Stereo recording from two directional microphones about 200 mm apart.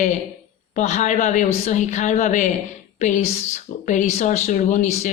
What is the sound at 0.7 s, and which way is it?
Speech, 35° left (ahead or behind).